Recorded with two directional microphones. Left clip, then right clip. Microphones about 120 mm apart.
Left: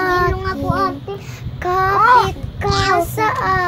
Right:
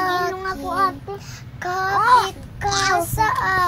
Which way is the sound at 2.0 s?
35° right (ahead or behind).